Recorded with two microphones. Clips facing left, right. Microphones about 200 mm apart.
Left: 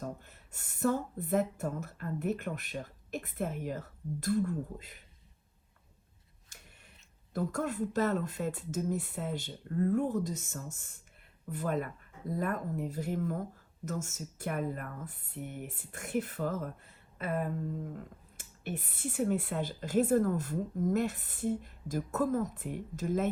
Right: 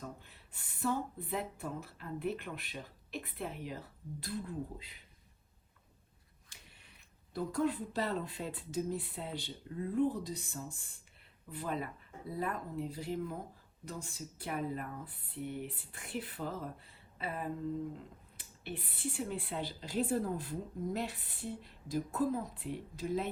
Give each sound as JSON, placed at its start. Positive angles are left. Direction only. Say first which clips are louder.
{"t": 0.0, "sound": "speech", "louder": "left 6 dB", "side_deg": 45}
{"t": 6.5, "sound": "a sound", "louder": "left 3 dB", "side_deg": 45}
{"t": 7.3, "sound": "speech", "louder": "left 1 dB", "side_deg": 45}